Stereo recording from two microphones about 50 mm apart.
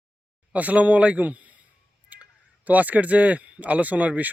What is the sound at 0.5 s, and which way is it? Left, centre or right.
Speech, right.